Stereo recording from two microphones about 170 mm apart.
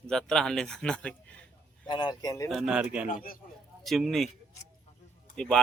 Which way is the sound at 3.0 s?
55° left (ahead or behind).